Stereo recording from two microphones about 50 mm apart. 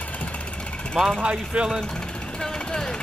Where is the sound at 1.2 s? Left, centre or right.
Right.